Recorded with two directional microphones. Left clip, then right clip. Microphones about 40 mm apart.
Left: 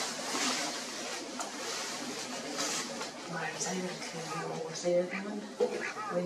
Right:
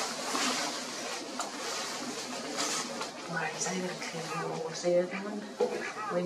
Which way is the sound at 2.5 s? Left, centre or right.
Centre.